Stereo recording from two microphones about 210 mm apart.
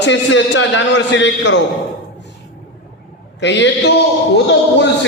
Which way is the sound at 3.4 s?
55° left (ahead or behind).